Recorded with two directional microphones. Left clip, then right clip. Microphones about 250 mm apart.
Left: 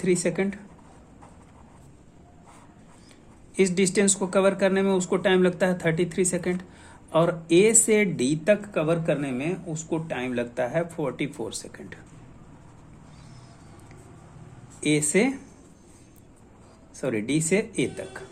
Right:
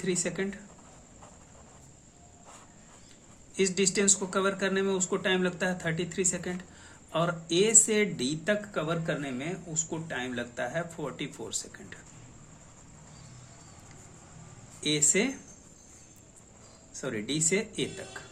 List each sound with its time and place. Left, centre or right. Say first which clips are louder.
0.0 s speech: left 7 dB; left
3.5 s speech: left 5 dB; left
14.8 s speech: left 4 dB; left
16.9 s speech: left 7 dB; left